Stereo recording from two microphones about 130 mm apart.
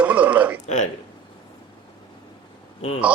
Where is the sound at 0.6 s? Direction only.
65° left (ahead or behind).